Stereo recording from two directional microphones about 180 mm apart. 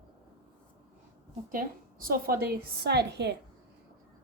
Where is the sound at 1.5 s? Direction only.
50° right (ahead or behind); by 3.3 s 65° right (ahead or behind).